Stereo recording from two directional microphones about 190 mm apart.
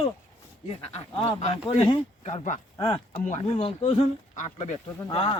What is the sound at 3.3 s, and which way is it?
Speech, 35° left (ahead or behind).